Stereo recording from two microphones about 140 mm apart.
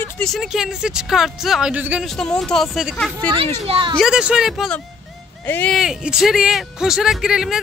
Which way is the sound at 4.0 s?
5° right (ahead or behind).